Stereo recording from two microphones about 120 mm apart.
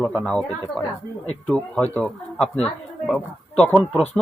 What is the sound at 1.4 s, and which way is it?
Speech, 10° left (ahead or behind).